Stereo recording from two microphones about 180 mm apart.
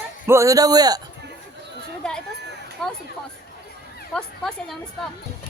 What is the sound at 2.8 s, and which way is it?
Speech, 5° left (ahead or behind).